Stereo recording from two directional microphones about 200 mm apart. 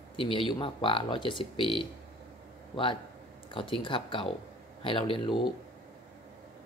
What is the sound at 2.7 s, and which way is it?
Speech, 25° left (ahead or behind).